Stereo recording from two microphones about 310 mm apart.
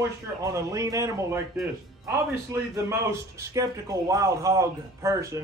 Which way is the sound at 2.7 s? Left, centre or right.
Centre.